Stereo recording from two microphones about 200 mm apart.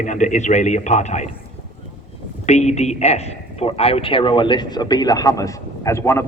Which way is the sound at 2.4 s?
35° left (ahead or behind).